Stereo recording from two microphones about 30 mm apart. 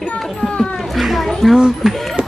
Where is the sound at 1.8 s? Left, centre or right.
Centre.